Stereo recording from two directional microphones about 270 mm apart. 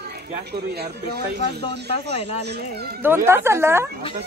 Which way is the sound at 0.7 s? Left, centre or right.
Right.